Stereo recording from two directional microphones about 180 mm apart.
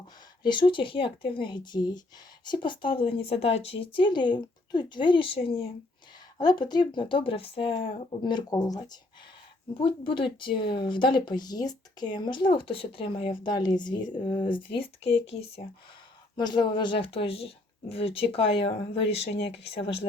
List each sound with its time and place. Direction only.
0.4 s speech: 25° left (ahead or behind)